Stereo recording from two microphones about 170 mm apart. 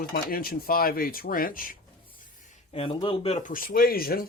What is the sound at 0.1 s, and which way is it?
Speech, 60° left (ahead or behind).